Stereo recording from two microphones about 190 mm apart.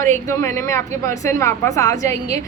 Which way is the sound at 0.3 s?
15° left (ahead or behind).